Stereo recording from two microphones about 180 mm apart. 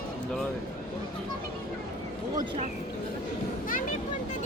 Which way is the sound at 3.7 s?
45° left (ahead or behind).